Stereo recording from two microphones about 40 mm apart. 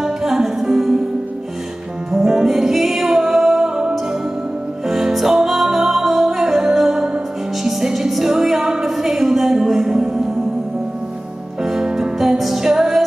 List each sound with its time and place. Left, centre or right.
0.0 s music: centre
2.1 s music: centre
11.6 s music: centre
12.2 s music: centre